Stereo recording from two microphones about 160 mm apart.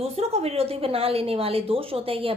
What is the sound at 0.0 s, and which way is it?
A woman's voice, 40° right (ahead or behind).